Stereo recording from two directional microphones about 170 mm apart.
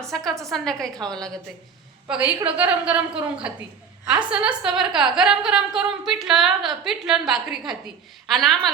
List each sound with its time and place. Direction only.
0.3 s a woman's voice: centre (ahead or behind)
2.0 s a woman's voice: 10° right (ahead or behind)
4.0 s a woman's voice: 5° right (ahead or behind)